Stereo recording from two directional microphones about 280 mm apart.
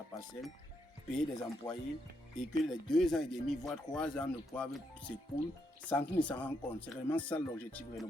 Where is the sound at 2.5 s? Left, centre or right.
Centre.